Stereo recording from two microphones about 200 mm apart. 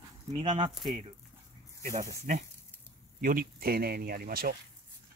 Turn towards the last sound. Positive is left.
turn(degrees=-50)  # may be behind; listen again after turning